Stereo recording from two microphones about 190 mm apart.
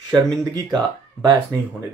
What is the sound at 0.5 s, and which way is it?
Speech, 20° right (ahead or behind).